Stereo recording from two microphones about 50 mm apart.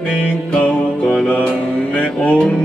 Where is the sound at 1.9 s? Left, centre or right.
Left.